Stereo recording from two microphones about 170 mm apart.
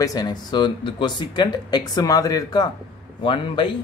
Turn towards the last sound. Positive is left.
turn(degrees=30)  # may be behind; listen again after turning